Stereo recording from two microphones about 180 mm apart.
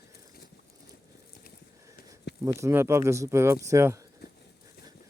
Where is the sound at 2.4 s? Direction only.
15° right (ahead or behind).